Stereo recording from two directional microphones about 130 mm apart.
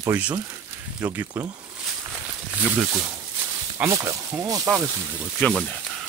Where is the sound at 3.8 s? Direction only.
20° right (ahead or behind).